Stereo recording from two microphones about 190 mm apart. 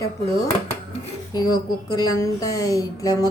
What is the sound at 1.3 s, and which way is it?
A woman's voice, 20° left (ahead or behind).